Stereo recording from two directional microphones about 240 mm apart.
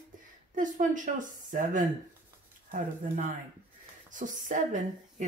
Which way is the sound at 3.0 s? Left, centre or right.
Right.